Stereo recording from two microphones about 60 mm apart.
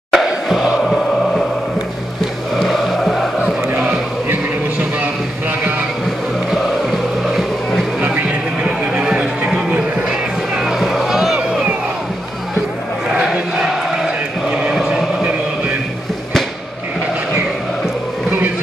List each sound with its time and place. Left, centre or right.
0.1 s crowd: centre
2.5 s music: centre
6.5 s music: centre
8.0 s a sound: right
10.8 s boat: centre
13.1 s chant: centre
14.8 s a sound: centre